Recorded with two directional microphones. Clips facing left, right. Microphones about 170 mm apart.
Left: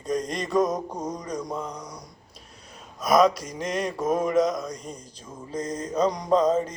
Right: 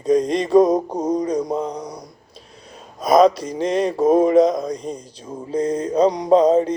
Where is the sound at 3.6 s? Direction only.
30° right (ahead or behind).